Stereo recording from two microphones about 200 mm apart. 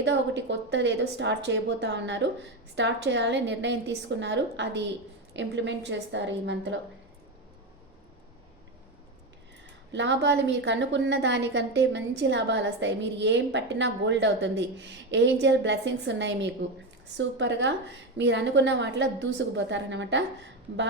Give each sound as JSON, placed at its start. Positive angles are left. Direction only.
{"t": 0.0, "sound": "a woman's voice", "side_deg": -60}
{"t": 9.9, "sound": "a woman's voice", "side_deg": -65}